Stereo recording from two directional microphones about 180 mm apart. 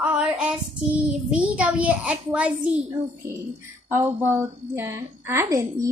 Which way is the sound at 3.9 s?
10° right (ahead or behind).